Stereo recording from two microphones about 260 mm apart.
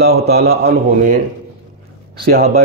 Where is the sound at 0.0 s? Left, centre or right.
Right.